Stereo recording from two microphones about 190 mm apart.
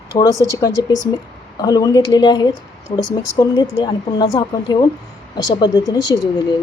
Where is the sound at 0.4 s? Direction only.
15° left (ahead or behind).